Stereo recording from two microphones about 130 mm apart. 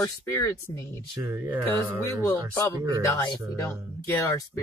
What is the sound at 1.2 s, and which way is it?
Speech, 15° right (ahead or behind).